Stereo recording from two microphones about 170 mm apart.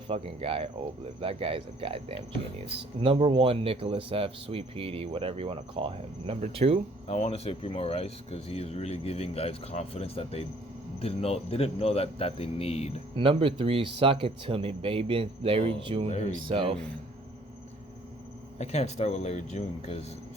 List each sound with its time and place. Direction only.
0.1 s speech: 35° right (ahead or behind)
7.1 s speech: 35° left (ahead or behind)
13.1 s speech: 30° right (ahead or behind)
18.6 s speech: 40° left (ahead or behind)